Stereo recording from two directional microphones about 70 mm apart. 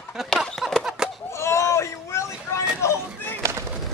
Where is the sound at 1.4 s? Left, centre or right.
Left.